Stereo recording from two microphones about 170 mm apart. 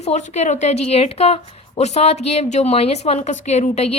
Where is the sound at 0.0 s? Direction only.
40° left (ahead or behind).